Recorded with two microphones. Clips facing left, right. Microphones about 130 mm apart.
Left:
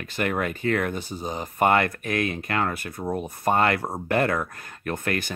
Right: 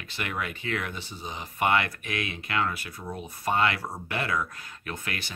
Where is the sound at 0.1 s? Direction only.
45° left (ahead or behind).